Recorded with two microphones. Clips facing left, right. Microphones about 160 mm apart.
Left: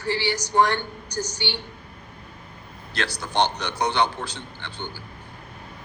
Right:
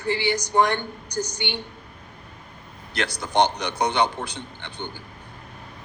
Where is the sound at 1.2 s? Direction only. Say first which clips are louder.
Even; 55° right (ahead or behind).